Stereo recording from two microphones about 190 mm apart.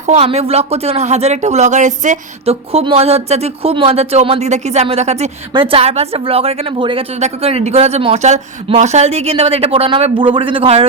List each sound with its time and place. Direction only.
0.1 s speech: 30° right (ahead or behind)